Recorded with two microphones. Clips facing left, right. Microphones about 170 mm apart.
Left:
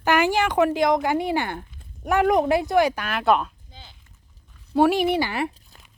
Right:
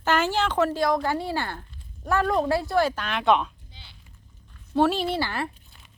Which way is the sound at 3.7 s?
45° left (ahead or behind).